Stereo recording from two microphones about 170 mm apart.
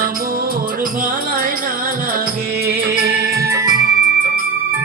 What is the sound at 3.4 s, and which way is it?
Music, 20° right (ahead or behind).